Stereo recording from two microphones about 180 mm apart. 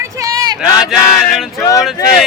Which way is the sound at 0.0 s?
15° right (ahead or behind).